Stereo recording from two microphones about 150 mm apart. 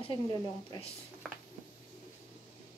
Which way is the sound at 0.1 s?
25° left (ahead or behind).